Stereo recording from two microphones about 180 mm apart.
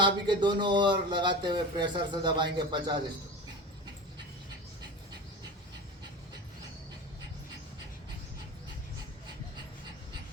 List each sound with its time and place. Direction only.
0.0 s speech: 25° right (ahead or behind)